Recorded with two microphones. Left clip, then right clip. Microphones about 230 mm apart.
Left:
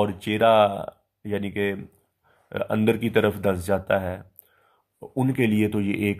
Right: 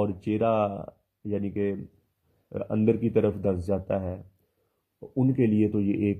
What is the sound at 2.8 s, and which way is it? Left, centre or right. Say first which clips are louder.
Speech: left 2 dB; centre.